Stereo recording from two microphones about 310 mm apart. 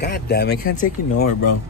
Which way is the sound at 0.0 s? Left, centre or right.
Left.